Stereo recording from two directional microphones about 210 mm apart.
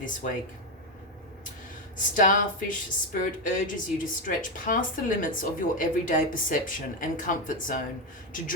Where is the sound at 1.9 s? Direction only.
40° left (ahead or behind).